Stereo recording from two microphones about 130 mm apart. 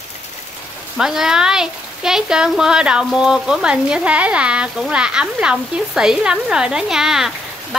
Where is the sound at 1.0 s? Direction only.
5° right (ahead or behind).